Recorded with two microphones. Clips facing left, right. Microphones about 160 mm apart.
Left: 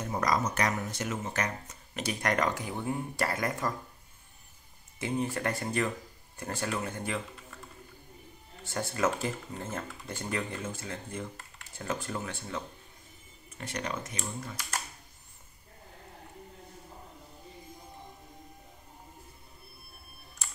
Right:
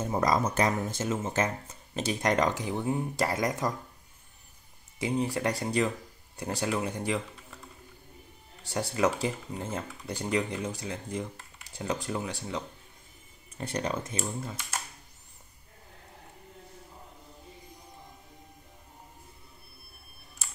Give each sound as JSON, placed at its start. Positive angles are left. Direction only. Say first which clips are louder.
{"t": 0.0, "sound": "speech", "louder": "right 3 dB", "side_deg": -25}
{"t": 4.9, "sound": "speech", "louder": "right 3 dB", "side_deg": -15}
{"t": 8.7, "sound": "speech", "louder": "right 3 dB", "side_deg": -15}
{"t": 11.3, "sound": "typing", "louder": "even", "side_deg": -5}
{"t": 11.8, "sound": "speech", "louder": "right 3 dB", "side_deg": -15}
{"t": 13.6, "sound": "speech", "louder": "right 4 dB", "side_deg": -30}